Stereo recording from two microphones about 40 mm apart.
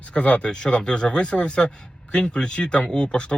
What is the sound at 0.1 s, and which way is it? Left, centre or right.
Speech, left.